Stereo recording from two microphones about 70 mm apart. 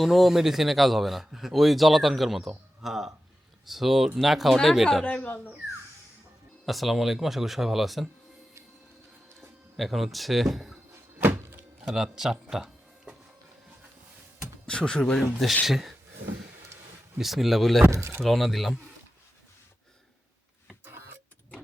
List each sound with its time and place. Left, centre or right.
0.0 s speech: centre
5.0 s speech: left
6.7 s speech: centre
9.7 s speech: centre
10.9 s thunk: right
11.9 s speech: centre
14.7 s speech: centre
15.2 s speech: centre
17.2 s speech: centre
17.9 s speech: right
18.2 s speech: centre
20.8 s vehicle: right